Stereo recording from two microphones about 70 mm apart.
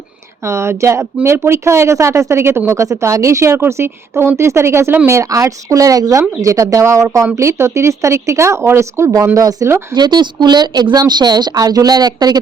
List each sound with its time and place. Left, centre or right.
0.4 s speech: right
9.9 s a woman's voice: right